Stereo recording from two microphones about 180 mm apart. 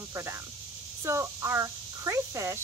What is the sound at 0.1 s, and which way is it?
Speech, 15° right (ahead or behind).